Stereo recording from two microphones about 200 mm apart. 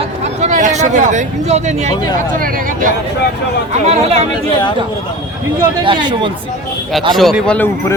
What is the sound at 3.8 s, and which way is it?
Speech, 30° right (ahead or behind).